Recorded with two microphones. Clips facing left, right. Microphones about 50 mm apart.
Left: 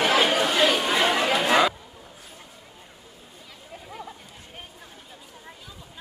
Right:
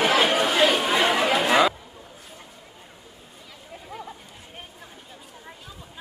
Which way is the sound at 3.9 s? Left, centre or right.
Centre.